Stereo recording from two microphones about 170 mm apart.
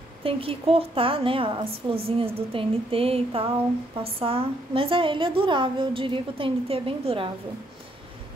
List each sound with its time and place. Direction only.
0.2 s a woman's voice: 35° right (ahead or behind)